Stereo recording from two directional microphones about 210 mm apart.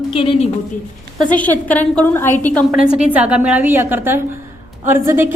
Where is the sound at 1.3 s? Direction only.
5° left (ahead or behind).